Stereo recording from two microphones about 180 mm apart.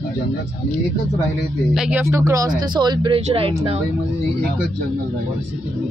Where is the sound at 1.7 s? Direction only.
5° right (ahead or behind).